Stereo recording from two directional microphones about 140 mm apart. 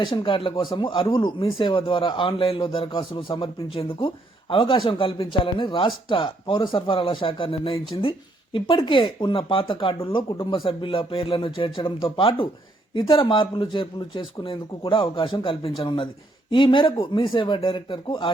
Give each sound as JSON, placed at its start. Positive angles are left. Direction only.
{"t": 0.0, "sound": "speech", "side_deg": 35}